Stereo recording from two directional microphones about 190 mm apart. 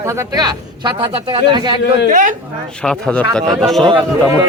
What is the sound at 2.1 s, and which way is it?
Speech, 40° right (ahead or behind).